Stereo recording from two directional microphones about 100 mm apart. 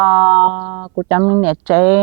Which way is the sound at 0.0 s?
20° right (ahead or behind).